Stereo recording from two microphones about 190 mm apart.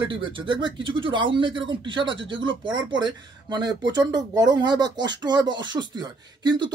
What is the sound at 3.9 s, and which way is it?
Speech, 20° right (ahead or behind).